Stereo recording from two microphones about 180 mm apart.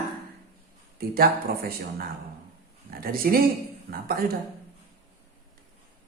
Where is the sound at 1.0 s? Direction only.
55° right (ahead or behind).